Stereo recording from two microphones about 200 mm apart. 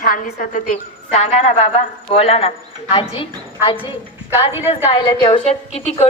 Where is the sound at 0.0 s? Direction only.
45° left (ahead or behind).